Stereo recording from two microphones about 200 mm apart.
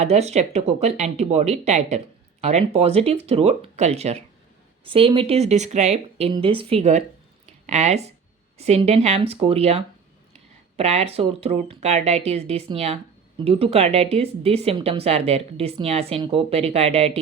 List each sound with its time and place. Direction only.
0.0 s speech: 30° right (ahead or behind)
7.4 s a sound: 35° right (ahead or behind)
8.5 s speech: 30° right (ahead or behind)